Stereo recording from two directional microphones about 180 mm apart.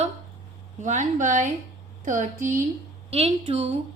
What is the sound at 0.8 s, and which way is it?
A woman's voice, 45° right (ahead or behind).